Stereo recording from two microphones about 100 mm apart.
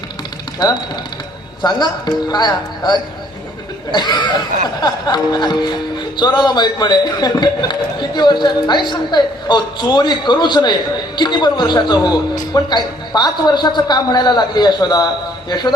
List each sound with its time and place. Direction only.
1.6 s speech: 45° left (ahead or behind)